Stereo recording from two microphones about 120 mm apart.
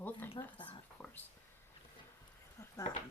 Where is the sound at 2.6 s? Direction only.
30° left (ahead or behind).